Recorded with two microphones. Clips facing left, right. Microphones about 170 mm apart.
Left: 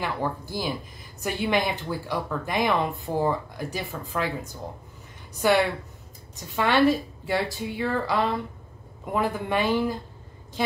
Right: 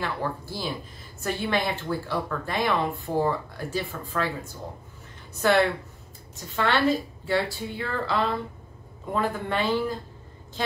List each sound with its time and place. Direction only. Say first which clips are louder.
0.0 s a woman's voice: left 1 dB; 15° left (ahead or behind)